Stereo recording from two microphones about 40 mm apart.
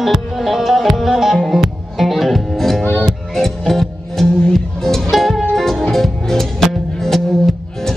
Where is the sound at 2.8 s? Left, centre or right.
Left.